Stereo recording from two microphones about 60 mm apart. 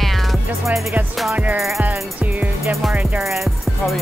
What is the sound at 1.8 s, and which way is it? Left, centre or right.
Music, right.